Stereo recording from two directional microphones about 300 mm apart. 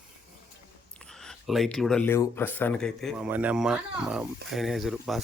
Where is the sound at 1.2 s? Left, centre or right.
Centre.